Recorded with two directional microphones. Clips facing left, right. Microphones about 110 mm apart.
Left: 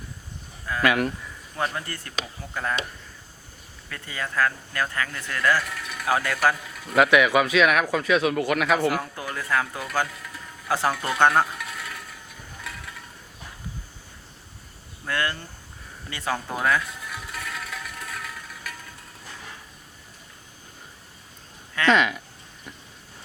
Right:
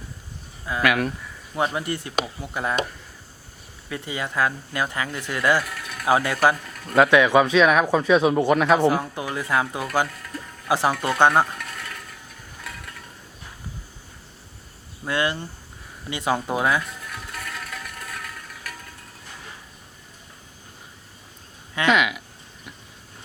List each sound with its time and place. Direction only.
0.7 s speech: 15° right (ahead or behind)
3.8 s speech: 15° right (ahead or behind)
5.6 s mechanisms: centre (ahead or behind)
6.1 s speech: 20° right (ahead or behind)
6.6 s a sound: 5° left (ahead or behind)
6.9 s speech: 20° right (ahead or behind)
10.1 s a sound: centre (ahead or behind)
10.7 s speech: 15° right (ahead or behind)
10.9 s speech: centre (ahead or behind)
11.3 s a sound: centre (ahead or behind)
15.0 s speech: 20° right (ahead or behind)
16.8 s music: centre (ahead or behind)
21.8 s a sound: 5° right (ahead or behind)